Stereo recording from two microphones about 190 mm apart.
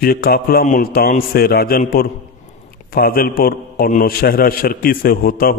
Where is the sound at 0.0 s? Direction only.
50° left (ahead or behind).